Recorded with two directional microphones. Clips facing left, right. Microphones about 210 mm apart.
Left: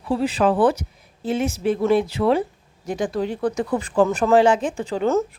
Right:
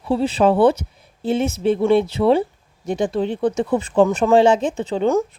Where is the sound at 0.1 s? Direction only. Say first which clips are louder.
Right 3 dB; 25° right (ahead or behind).